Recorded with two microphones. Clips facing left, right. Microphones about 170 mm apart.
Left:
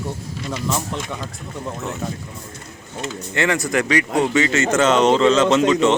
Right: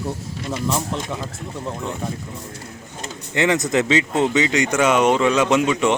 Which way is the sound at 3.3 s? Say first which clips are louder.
Right 2 dB; 20° right (ahead or behind).